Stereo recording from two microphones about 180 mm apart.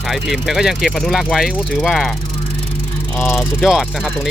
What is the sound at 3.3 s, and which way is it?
Speech, centre (ahead or behind).